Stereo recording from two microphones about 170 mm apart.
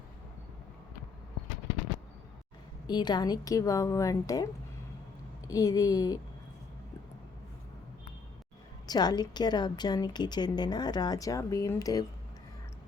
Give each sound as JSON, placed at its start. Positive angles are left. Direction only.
{"t": 2.8, "sound": "a woman's voice", "side_deg": 25}
{"t": 5.5, "sound": "a woman's voice", "side_deg": 20}
{"t": 8.9, "sound": "a woman's voice", "side_deg": 25}